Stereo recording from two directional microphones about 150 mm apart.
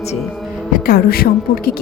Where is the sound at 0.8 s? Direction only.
85° left.